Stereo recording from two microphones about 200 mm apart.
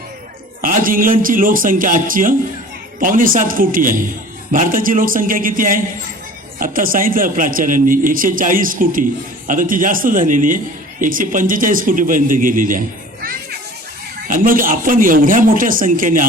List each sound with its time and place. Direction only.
0.6 s a man's voice: 45° right (ahead or behind)
14.3 s a man's voice: 45° right (ahead or behind)